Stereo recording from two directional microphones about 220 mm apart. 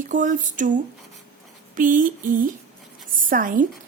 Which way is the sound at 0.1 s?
35° right (ahead or behind).